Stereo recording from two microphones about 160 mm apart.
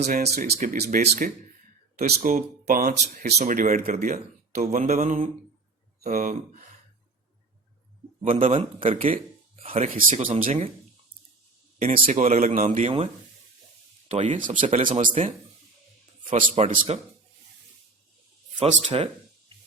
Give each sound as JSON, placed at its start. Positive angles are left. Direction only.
{"t": 0.1, "sound": "speech", "side_deg": -75}
{"t": 0.6, "sound": "speech", "side_deg": -55}
{"t": 2.2, "sound": "speech", "side_deg": -65}
{"t": 8.4, "sound": "speech", "side_deg": -35}
{"t": 11.8, "sound": "speech", "side_deg": -50}
{"t": 14.1, "sound": "speech", "side_deg": -45}
{"t": 16.6, "sound": "speech", "side_deg": -40}
{"t": 18.6, "sound": "speech", "side_deg": -40}